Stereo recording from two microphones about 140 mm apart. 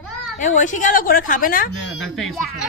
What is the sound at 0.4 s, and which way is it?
A woman's voice, 65° left (ahead or behind).